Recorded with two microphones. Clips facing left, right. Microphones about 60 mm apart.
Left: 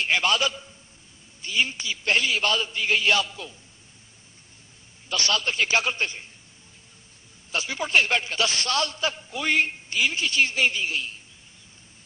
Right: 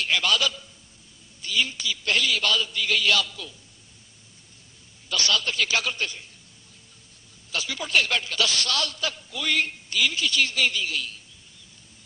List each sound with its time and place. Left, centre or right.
0.0 s a man's voice: left
5.1 s a man's voice: left
7.5 s a man's voice: left